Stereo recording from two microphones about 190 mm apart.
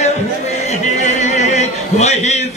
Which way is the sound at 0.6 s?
40° left (ahead or behind).